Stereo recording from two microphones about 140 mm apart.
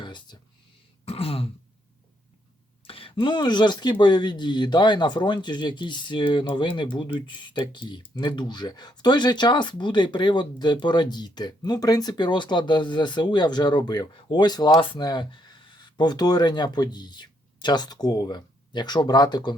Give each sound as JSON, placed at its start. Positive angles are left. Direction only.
{"t": 0.0, "sound": "a sound", "side_deg": 30}
{"t": 1.0, "sound": "throat clearing", "side_deg": 45}
{"t": 2.8, "sound": "speech", "side_deg": 40}